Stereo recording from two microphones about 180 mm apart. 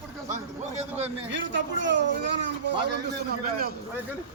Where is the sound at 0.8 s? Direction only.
35° right (ahead or behind).